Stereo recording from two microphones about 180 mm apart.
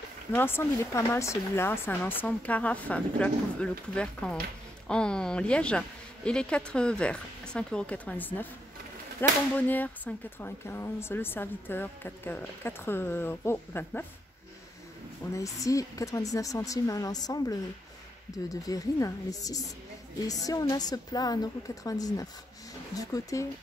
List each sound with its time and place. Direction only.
0.3 s speech: 10° left (ahead or behind)
15.3 s a woman's voice: 20° left (ahead or behind)